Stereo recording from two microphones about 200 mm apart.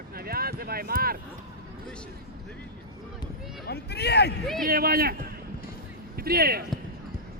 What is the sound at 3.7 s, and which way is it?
Speech, 55° left (ahead or behind).